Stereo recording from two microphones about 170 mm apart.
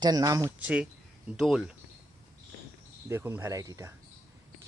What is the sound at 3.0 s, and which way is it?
Speech, 15° right (ahead or behind).